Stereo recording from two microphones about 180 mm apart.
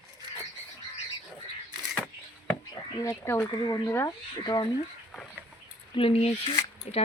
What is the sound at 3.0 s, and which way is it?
Speech, 15° left (ahead or behind).